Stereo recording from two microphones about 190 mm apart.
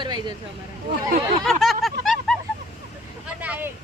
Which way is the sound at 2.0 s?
Centre (ahead or behind).